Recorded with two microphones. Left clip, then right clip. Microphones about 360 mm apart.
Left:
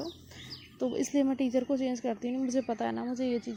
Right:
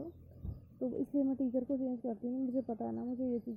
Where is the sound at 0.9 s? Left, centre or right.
Left.